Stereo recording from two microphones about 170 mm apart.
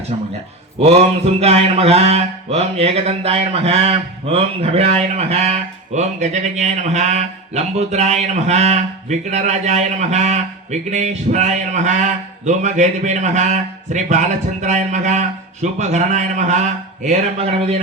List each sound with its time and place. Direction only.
0.1 s mantra: 35° right (ahead or behind)